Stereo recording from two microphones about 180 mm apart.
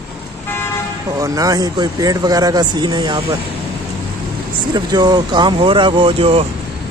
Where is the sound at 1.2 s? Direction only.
20° right (ahead or behind).